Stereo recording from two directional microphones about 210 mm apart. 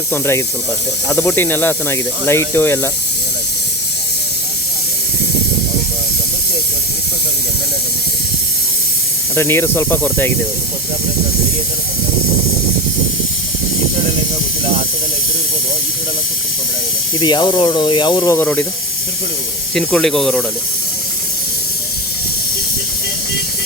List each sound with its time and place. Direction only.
0.1 s speech: 10° left (ahead or behind)
9.3 s speech: 10° left (ahead or behind)
17.2 s speech: 20° left (ahead or behind)
19.7 s speech: 5° left (ahead or behind)